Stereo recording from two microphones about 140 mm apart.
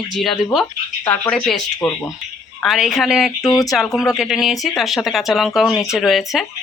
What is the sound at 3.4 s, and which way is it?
Speech, 25° left (ahead or behind).